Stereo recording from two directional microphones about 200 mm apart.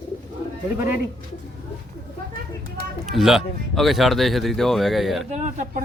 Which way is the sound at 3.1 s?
Centre (ahead or behind).